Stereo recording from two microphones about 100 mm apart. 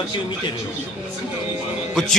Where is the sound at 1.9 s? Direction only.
Centre (ahead or behind).